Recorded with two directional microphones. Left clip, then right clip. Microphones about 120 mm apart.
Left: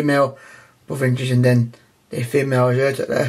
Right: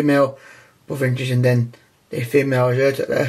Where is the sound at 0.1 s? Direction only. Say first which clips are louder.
Right 1 dB; 15° left (ahead or behind).